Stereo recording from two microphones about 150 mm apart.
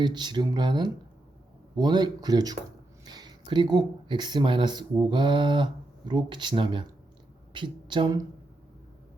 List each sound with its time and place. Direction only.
0.0 s speech: 30° right (ahead or behind)